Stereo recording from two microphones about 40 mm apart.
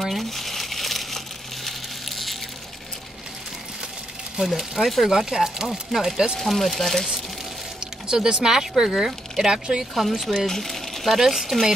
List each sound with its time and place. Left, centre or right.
0.0 s crumpling: centre
4.6 s speech: centre
6.3 s speech: centre
7.8 s speech: centre
9.9 s speech: centre
11.1 s speech: centre